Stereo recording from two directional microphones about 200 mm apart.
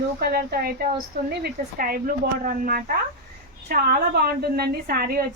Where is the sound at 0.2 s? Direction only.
50° right (ahead or behind).